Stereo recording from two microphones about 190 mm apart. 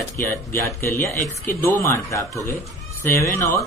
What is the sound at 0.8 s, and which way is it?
Speech, 15° left (ahead or behind).